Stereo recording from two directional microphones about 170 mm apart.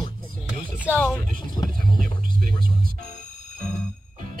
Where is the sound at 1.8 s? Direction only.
55° right (ahead or behind).